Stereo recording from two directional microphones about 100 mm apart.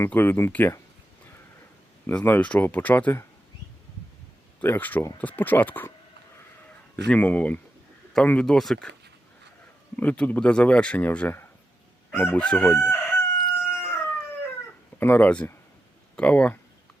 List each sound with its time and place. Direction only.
0.0 s speech: 20° left (ahead or behind)
2.2 s speech: 15° left (ahead or behind)
4.6 s speech: 20° left (ahead or behind)
6.9 s speech: 15° left (ahead or behind)
9.9 s speech: 15° left (ahead or behind)
12.6 s crowing: 20° left (ahead or behind)
14.9 s speech: 20° left (ahead or behind)